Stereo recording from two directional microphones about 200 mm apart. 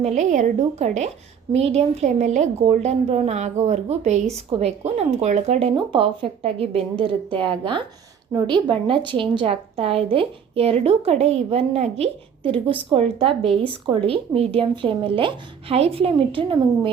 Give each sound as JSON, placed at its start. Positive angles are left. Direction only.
{"t": 0.0, "sound": "a woman's voice", "side_deg": -35}